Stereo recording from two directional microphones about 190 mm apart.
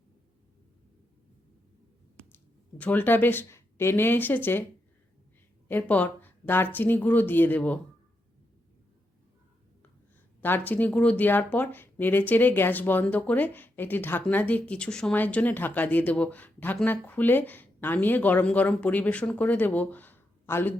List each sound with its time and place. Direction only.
2.3 s speech: 10° left (ahead or behind)
5.6 s speech: 10° left (ahead or behind)
10.4 s speech: 10° left (ahead or behind)